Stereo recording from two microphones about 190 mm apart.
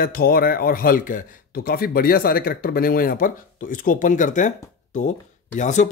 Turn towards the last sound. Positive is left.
turn(degrees=40)  # may be behind; listen again after turning